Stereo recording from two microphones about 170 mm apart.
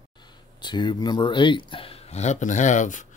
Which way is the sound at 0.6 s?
25° left (ahead or behind).